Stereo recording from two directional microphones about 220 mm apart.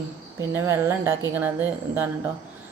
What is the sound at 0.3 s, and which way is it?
Speech, 10° right (ahead or behind).